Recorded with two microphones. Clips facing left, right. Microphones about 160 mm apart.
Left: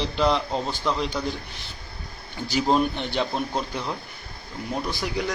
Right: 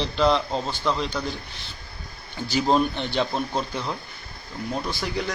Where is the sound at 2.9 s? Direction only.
10° left (ahead or behind).